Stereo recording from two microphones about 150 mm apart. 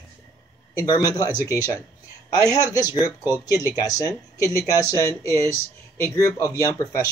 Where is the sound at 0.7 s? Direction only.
25° left (ahead or behind).